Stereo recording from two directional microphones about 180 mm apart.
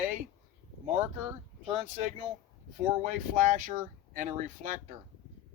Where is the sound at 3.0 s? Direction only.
45° right (ahead or behind).